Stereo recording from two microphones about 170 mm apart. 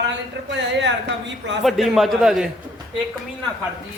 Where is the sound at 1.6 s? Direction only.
Centre (ahead or behind).